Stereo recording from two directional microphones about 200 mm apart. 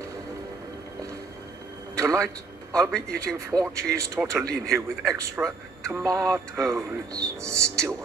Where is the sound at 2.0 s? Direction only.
15° right (ahead or behind).